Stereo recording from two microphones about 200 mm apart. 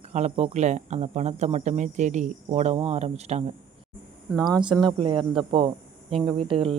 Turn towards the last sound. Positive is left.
turn(degrees=-25)  # may be behind; listen again after turning